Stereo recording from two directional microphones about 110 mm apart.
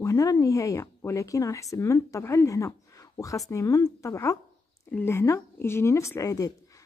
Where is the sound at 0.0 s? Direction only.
30° left (ahead or behind).